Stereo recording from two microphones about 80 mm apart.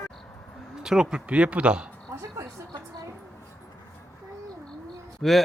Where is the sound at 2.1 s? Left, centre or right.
Right.